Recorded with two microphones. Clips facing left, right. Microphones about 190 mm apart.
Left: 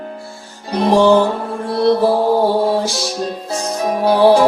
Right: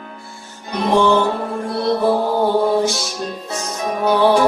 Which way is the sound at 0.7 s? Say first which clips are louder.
Left 3 dB; 30° left (ahead or behind).